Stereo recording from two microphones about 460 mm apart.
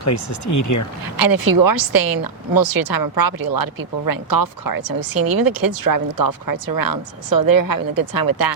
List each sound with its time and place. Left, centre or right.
0.0 s speech: left
1.1 s a woman's voice: right